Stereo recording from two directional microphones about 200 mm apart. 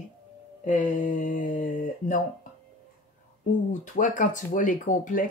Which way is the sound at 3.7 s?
40° left (ahead or behind).